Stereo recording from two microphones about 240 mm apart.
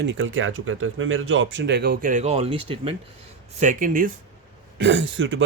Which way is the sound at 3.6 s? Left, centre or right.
Right.